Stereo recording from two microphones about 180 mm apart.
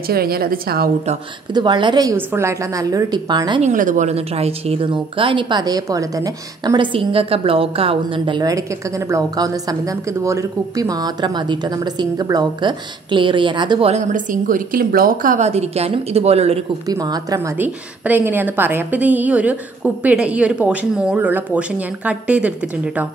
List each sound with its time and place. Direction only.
0.1 s a woman's voice: 55° right (ahead or behind)
1.5 s a woman's voice: 25° right (ahead or behind)
3.6 s a woman's voice: 45° right (ahead or behind)
16.8 s a woman's voice: 20° right (ahead or behind)
17.6 s a woman's voice: 10° right (ahead or behind)